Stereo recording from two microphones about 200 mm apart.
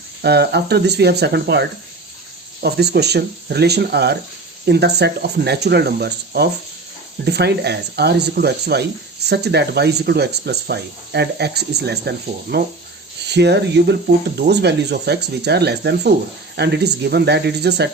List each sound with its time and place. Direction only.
0.2 s speech: 55° right (ahead or behind)